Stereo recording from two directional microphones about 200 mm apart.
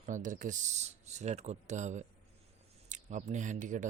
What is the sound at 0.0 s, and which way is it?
Speech, 40° right (ahead or behind).